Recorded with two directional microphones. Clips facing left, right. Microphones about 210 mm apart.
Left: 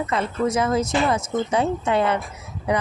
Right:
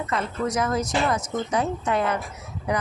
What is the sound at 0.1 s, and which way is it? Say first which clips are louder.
A woman's voice: left 3 dB; 25° left (ahead or behind).